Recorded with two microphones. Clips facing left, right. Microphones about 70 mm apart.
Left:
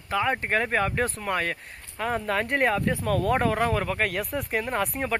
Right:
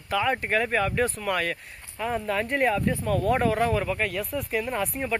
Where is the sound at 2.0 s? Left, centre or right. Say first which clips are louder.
Left 1 dB; left.